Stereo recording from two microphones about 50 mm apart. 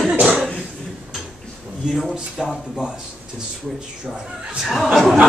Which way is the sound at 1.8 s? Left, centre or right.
Centre.